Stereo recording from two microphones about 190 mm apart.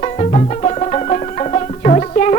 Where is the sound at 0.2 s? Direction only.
35° left (ahead or behind).